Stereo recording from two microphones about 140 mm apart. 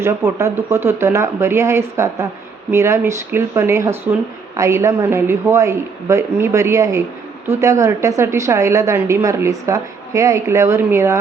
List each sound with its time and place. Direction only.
0.0 s a woman's voice: 20° right (ahead or behind)